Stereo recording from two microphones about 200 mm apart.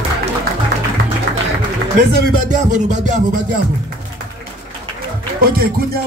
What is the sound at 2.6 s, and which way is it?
Music, 35° right (ahead or behind).